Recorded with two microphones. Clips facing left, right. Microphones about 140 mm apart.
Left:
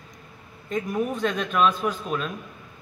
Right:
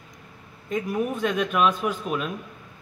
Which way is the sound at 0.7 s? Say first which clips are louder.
Even; 10° right (ahead or behind).